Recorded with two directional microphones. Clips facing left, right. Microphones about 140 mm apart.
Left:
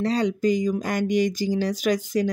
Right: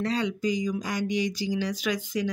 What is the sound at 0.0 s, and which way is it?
Speech, 40° left (ahead or behind).